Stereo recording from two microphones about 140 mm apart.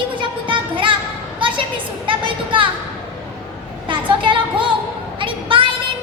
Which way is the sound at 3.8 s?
35° right (ahead or behind).